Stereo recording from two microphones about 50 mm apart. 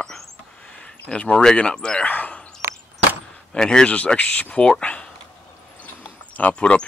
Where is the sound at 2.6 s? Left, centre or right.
Right.